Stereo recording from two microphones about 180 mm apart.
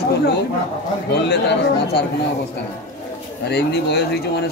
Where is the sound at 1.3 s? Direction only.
70° left (ahead or behind).